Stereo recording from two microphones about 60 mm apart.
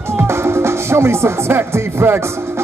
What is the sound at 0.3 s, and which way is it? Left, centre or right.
Music, right.